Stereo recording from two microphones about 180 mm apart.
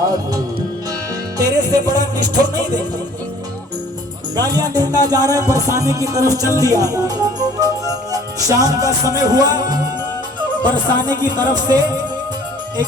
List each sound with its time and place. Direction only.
0.0 s music: 20° right (ahead or behind)
4.4 s music: 20° right (ahead or behind)
6.6 s speech: 20° right (ahead or behind)
10.9 s music: 25° right (ahead or behind)